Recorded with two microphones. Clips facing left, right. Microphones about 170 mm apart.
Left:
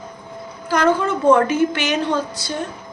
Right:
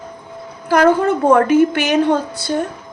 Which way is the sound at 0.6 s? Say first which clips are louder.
Right 5 dB; 55° right (ahead or behind).